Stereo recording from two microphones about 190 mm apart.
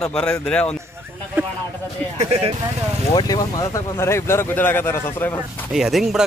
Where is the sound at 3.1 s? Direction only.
20° left (ahead or behind).